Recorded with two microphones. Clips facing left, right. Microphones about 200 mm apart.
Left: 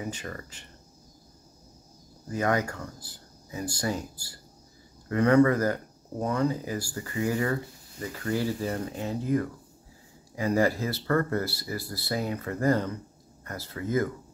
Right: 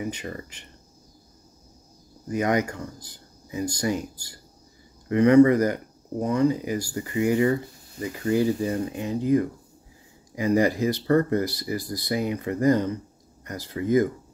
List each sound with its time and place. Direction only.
0.1 s speech: 20° right (ahead or behind)
2.2 s speech: 20° right (ahead or behind)